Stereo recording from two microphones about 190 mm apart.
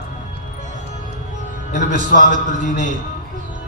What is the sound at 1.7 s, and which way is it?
A man's voice, 40° right (ahead or behind).